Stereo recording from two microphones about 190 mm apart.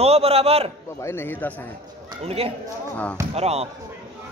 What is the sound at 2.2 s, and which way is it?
Speech, 30° right (ahead or behind).